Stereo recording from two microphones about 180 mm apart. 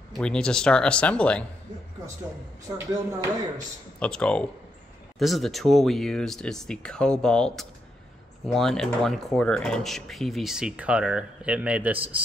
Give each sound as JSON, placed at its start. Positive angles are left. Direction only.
{"t": 0.2, "sound": "speech", "side_deg": 5}
{"t": 2.9, "sound": "speech", "side_deg": -20}
{"t": 4.0, "sound": "speech", "side_deg": 5}